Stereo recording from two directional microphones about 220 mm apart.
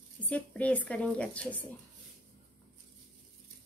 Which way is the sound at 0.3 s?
5° left (ahead or behind).